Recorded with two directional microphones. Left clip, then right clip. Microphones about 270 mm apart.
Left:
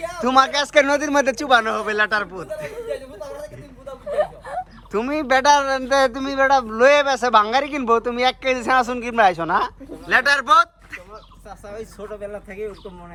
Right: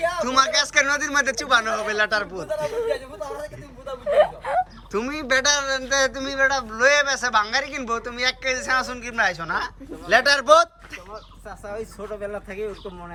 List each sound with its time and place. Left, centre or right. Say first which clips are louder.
0.0 s a man's voice: left 3 dB; centre
4.2 s a sound: right 4 dB; right
4.9 s a man's voice: left 4 dB; centre